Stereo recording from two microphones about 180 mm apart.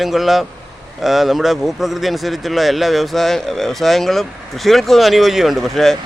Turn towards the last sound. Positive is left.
turn(degrees=0)  # may be behind; listen again after turning